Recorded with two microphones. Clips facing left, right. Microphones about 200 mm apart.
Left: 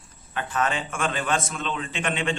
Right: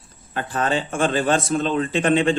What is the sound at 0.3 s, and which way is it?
Speech, 35° right (ahead or behind).